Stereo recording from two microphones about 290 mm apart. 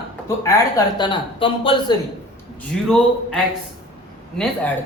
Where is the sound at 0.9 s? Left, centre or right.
Centre.